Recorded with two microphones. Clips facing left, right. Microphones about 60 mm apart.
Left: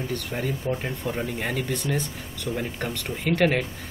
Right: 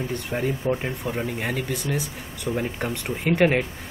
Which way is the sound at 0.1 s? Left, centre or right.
Right.